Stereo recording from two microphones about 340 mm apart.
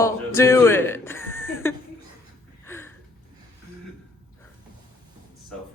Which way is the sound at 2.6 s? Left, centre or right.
Centre.